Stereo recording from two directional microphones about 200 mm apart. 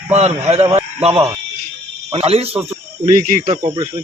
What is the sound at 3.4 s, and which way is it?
Speech, 25° right (ahead or behind).